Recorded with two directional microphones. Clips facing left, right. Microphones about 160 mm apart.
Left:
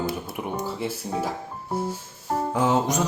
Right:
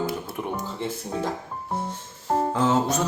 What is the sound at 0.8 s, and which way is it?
Speech, 10° left (ahead or behind).